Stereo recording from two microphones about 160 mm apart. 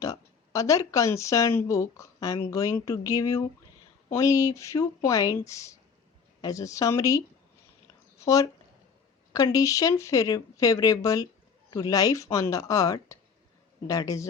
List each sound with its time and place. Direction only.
0.0 s speech: 20° left (ahead or behind)
8.2 s speech: 20° left (ahead or behind)